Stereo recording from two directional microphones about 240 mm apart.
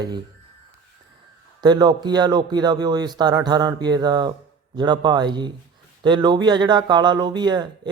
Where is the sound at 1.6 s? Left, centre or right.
Centre.